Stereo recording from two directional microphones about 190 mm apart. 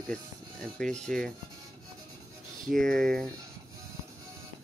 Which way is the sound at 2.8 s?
5° left (ahead or behind).